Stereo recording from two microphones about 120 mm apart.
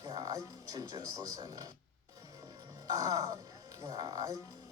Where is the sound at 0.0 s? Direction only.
35° right (ahead or behind).